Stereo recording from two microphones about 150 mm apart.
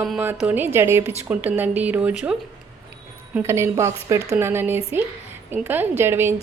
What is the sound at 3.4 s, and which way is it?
A woman's voice, 15° right (ahead or behind).